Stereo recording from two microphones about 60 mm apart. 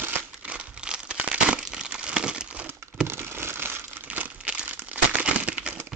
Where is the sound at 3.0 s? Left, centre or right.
Right.